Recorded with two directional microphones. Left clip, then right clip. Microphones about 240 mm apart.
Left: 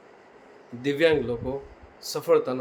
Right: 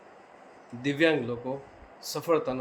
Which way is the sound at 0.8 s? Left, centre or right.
Centre.